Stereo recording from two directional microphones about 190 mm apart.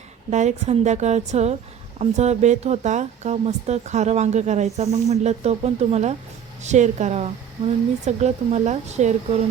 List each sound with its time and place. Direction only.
0.3 s speech: 35° right (ahead or behind)